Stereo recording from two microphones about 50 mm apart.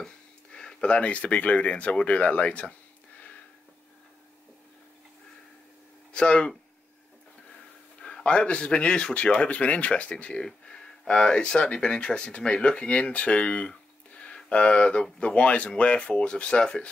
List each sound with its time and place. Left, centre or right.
0.0 s speech: centre
6.1 s speech: centre
8.0 s a man's voice: centre